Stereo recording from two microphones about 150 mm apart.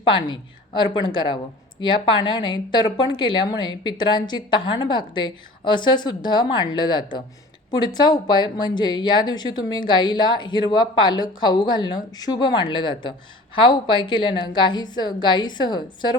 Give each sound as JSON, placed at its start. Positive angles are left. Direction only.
{"t": 0.0, "sound": "a woman's voice", "side_deg": 35}